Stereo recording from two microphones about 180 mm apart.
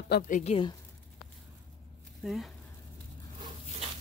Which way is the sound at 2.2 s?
Centre (ahead or behind).